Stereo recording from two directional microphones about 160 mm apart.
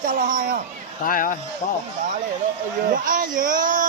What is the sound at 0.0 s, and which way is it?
Speech, 60° right (ahead or behind).